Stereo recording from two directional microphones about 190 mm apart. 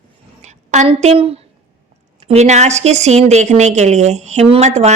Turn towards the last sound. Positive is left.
turn(degrees=-35)  # may be behind; listen again after turning